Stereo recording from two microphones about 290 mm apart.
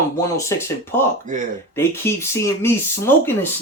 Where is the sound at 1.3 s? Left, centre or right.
Right.